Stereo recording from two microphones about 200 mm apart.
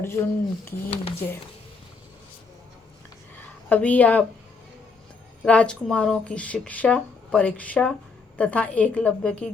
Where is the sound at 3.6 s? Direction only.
10° left (ahead or behind).